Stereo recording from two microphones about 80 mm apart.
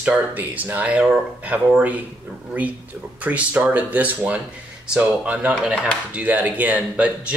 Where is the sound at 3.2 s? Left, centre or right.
Centre.